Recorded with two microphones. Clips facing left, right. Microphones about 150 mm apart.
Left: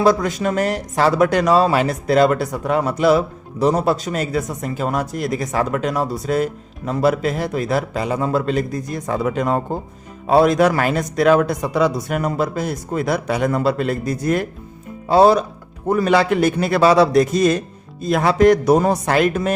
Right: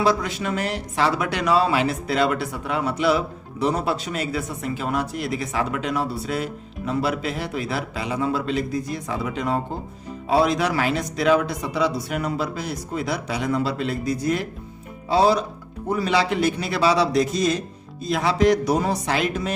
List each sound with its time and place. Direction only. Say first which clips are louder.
0.0 s speech: left 5 dB; 45° left (ahead or behind)